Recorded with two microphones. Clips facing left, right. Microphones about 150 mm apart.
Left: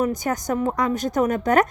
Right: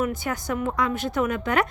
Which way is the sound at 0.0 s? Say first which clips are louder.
Left 4 dB; 40° left (ahead or behind).